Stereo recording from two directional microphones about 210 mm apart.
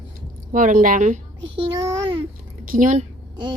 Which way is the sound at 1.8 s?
20° right (ahead or behind).